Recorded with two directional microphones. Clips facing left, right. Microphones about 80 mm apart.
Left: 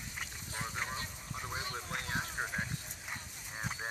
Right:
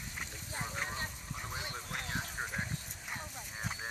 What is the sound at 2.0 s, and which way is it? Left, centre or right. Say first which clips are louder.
Vehicle: left 1 dB; left.